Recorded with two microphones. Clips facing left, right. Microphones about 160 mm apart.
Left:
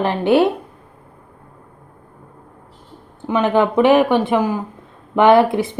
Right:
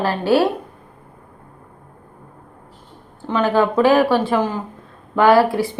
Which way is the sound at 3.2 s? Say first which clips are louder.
Left 1 dB; 20° left (ahead or behind).